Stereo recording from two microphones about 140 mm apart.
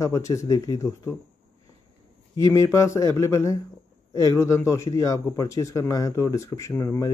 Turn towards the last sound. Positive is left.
turn(degrees=20)  # may be behind; listen again after turning